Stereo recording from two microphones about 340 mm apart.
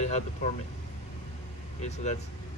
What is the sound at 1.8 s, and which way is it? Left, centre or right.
Speech, centre.